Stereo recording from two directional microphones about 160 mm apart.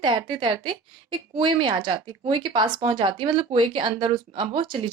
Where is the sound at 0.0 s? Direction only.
30° right (ahead or behind).